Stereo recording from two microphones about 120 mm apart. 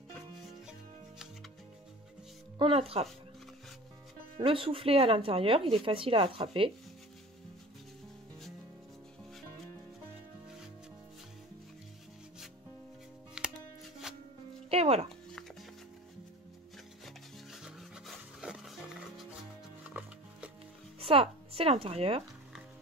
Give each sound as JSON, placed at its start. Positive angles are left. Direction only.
{"t": 2.6, "sound": "speech", "side_deg": -55}
{"t": 4.4, "sound": "speech", "side_deg": -50}
{"t": 13.4, "sound": "music", "side_deg": -5}
{"t": 14.7, "sound": "music", "side_deg": -55}
{"t": 17.0, "sound": "rub", "side_deg": -5}
{"t": 19.8, "sound": "music", "side_deg": -10}
{"t": 21.0, "sound": "a sound", "side_deg": -50}